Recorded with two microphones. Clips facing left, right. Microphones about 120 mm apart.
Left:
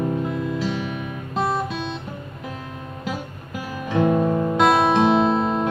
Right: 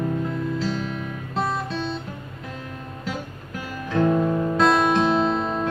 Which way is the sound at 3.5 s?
15° left (ahead or behind).